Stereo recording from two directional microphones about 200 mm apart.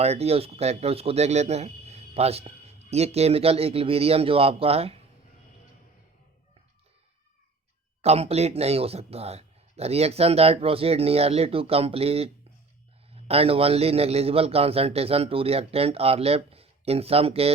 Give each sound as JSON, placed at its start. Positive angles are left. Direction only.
{"t": 0.0, "sound": "a man's voice", "side_deg": -30}
{"t": 8.0, "sound": "a man's voice", "side_deg": -30}